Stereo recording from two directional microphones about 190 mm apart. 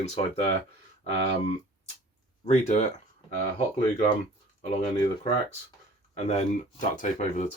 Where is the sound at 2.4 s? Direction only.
40° left (ahead or behind).